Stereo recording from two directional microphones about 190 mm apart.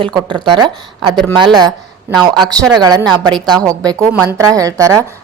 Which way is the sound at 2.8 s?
20° right (ahead or behind).